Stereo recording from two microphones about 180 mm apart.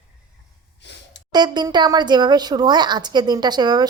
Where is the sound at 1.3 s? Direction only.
25° right (ahead or behind).